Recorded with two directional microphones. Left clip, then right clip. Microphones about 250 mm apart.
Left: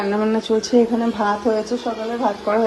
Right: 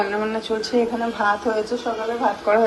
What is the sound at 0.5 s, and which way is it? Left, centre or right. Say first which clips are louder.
Speech: left 6 dB; left.